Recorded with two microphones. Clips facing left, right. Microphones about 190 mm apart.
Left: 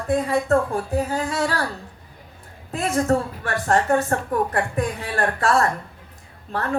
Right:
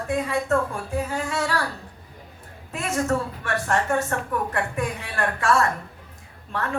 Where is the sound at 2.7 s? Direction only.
35° left (ahead or behind).